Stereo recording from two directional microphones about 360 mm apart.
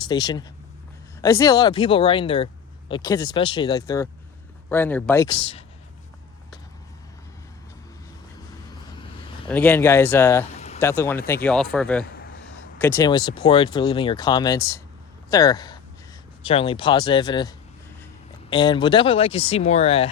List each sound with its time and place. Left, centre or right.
0.1 s speech: centre
9.5 s speech: centre
10.5 s a sound: centre
10.8 s speech: centre
18.5 s speech: centre